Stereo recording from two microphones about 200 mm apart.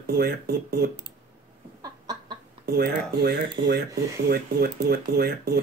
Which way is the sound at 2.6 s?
50° right (ahead or behind).